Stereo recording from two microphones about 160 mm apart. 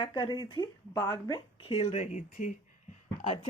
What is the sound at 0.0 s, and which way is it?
Speech, 30° left (ahead or behind).